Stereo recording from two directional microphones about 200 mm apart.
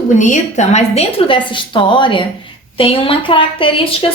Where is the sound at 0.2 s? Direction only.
35° left (ahead or behind).